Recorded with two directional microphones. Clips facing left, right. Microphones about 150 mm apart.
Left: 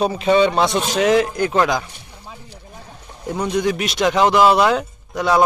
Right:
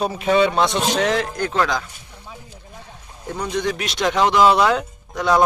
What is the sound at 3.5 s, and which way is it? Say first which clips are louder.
A man's voice: left 3 dB; 5° left (ahead or behind).